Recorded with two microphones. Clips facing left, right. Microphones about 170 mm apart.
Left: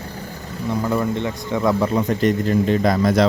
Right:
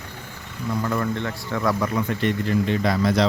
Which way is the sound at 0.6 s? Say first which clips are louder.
Left 3 dB; 20° left (ahead or behind).